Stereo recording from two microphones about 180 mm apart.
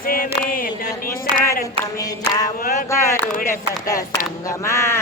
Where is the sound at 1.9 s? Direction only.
20° left (ahead or behind).